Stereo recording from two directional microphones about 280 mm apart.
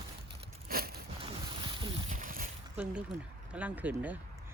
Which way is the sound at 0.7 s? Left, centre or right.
Right.